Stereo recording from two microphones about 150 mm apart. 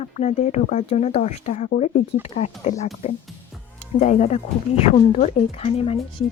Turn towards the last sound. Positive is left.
turn(degrees=40)  # may be behind; listen again after turning